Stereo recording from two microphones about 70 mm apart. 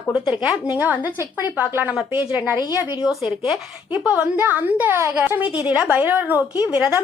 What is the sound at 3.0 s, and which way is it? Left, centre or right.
Speech, centre.